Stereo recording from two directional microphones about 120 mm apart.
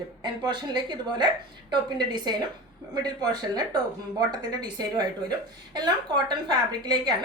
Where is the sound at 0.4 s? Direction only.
40° right (ahead or behind).